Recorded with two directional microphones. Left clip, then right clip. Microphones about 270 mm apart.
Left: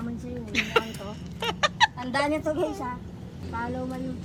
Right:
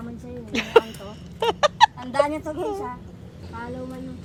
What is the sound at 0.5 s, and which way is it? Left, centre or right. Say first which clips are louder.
Speech: right 7 dB; centre.